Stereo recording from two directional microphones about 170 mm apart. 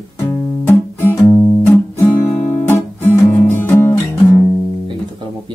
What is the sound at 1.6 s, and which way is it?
Guitar, 15° left (ahead or behind).